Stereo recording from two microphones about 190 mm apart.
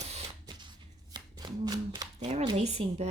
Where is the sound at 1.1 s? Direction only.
20° right (ahead or behind).